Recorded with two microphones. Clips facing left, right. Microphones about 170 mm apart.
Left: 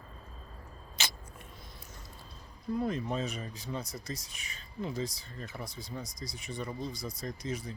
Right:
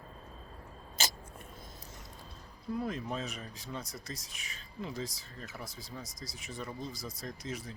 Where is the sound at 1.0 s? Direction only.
45° right (ahead or behind).